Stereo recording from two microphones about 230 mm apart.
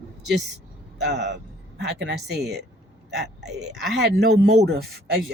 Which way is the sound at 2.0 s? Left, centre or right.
Right.